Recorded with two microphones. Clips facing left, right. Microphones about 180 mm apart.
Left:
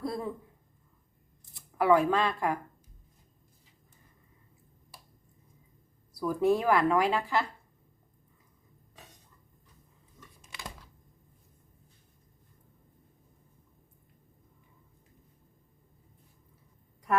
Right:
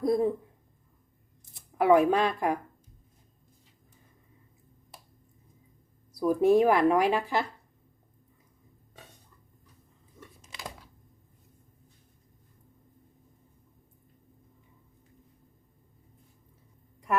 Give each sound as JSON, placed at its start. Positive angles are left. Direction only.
{"t": 0.0, "sound": "a sound", "side_deg": -20}
{"t": 1.5, "sound": "speech", "side_deg": -20}
{"t": 6.1, "sound": "speech", "side_deg": -20}